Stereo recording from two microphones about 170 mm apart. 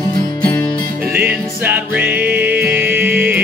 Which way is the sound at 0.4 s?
15° left (ahead or behind).